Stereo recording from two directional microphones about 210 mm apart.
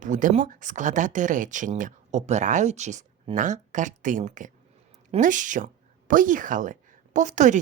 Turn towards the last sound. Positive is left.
turn(degrees=-35)  # may be behind; listen again after turning